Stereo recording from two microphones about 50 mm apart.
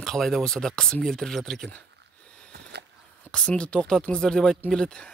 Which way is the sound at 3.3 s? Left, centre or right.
Centre.